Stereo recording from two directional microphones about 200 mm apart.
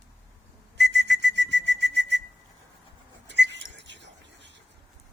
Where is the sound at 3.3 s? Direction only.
60° right (ahead or behind).